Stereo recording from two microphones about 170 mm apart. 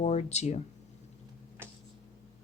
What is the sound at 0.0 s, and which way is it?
Speech, 40° left (ahead or behind).